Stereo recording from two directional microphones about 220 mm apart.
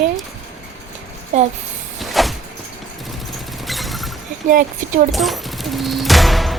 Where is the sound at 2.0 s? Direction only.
Centre (ahead or behind).